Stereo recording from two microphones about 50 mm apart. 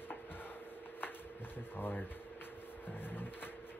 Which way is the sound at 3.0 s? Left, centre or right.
Left.